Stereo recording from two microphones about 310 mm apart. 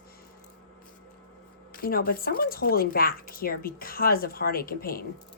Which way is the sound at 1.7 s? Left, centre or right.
Left.